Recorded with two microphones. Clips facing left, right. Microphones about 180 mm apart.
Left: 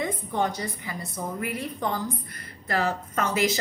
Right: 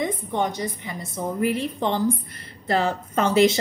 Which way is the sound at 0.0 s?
20° right (ahead or behind).